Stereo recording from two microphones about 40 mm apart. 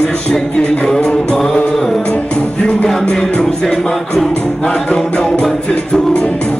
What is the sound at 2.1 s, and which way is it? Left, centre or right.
Music, left.